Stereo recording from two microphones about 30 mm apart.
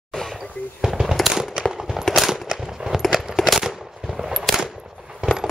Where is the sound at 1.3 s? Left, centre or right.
Right.